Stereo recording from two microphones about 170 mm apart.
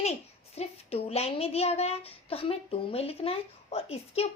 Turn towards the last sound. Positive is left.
turn(degrees=35)  # may be behind; listen again after turning